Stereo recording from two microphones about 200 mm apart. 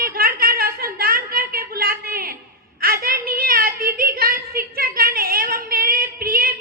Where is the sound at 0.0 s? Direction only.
45° right (ahead or behind).